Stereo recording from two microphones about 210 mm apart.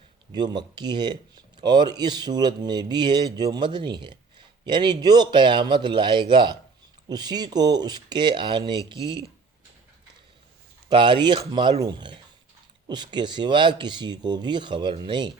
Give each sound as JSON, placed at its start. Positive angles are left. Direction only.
{"t": 0.3, "sound": "speech", "side_deg": -20}
{"t": 10.8, "sound": "speech", "side_deg": -25}